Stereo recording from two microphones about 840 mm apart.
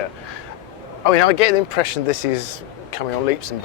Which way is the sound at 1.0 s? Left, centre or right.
Left.